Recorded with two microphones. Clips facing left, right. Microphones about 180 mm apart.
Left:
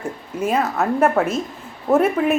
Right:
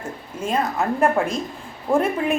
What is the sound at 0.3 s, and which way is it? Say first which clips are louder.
A woman's voice: left 3 dB; 10° left (ahead or behind).